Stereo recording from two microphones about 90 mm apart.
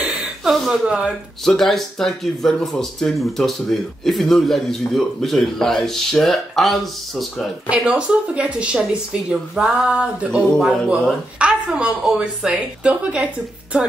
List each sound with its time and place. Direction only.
0.0 s a sound: 10° right (ahead or behind)
0.6 s a woman's voice: 5° right (ahead or behind)
1.4 s a man's voice: 5° left (ahead or behind)
7.7 s a woman's voice: 10° right (ahead or behind)
10.6 s a man's voice: 5° left (ahead or behind)
11.3 s a woman's voice: 10° right (ahead or behind)